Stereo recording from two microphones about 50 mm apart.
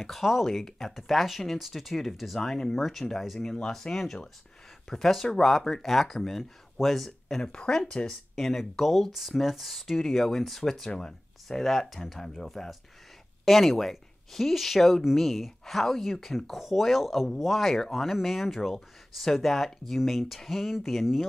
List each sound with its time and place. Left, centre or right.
0.0 s speech: centre
3.3 s speech: centre
7.5 s speech: centre
8.4 s speech: centre
11.4 s speech: centre